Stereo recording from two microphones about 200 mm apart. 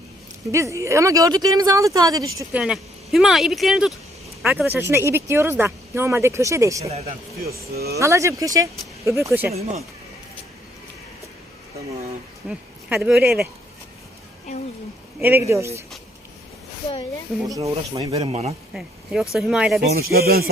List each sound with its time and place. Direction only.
0.5 s speech: 15° right (ahead or behind)
2.4 s speech: 5° right (ahead or behind)
6.8 s speech: 30° right (ahead or behind)
7.9 s speech: 15° right (ahead or behind)
9.6 s speech: 30° right (ahead or behind)
12.5 s speech: 5° right (ahead or behind)
15.2 s speech: 10° right (ahead or behind)
17.5 s speech: 15° right (ahead or behind)
18.2 s speech: 30° right (ahead or behind)
18.7 s speech: centre (ahead or behind)
19.8 s speech: 50° right (ahead or behind)